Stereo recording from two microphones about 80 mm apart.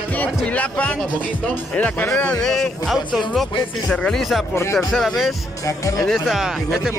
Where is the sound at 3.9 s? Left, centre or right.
Centre.